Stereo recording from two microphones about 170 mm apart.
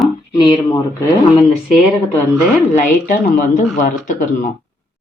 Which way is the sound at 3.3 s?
50° left (ahead or behind).